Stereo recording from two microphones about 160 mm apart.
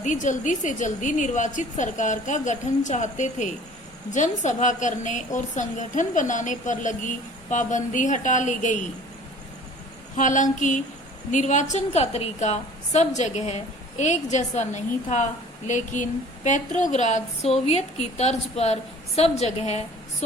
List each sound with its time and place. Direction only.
0.0 s a woman's voice: 50° left (ahead or behind)
10.2 s a woman's voice: 50° left (ahead or behind)